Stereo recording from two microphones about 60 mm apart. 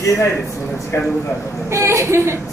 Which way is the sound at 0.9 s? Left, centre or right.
Left.